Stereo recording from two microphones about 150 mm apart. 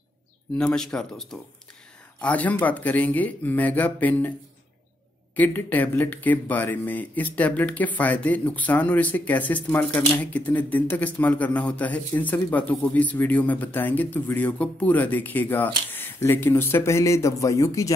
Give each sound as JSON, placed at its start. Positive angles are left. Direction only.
{"t": 0.6, "sound": "speech", "side_deg": 5}
{"t": 5.3, "sound": "speech", "side_deg": 10}